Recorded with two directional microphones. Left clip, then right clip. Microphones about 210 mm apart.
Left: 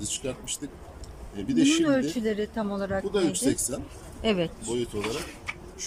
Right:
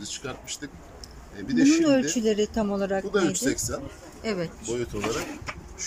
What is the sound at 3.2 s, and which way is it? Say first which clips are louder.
Speech: left 1 dB; 5° left (ahead or behind).